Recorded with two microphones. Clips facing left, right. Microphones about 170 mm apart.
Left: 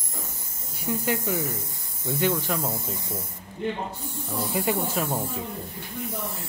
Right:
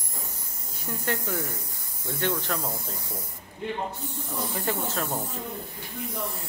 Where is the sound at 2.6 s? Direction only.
25° left (ahead or behind).